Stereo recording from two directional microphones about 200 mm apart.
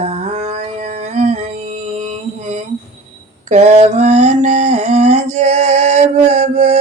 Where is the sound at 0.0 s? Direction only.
30° right (ahead or behind).